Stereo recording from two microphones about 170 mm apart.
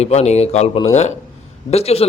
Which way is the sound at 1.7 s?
35° left (ahead or behind).